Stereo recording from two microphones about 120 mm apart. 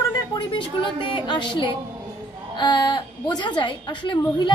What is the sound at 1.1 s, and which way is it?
A woman's voice, 40° left (ahead or behind).